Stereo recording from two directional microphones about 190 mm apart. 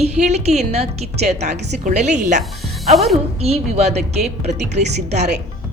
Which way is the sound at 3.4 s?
35° right (ahead or behind).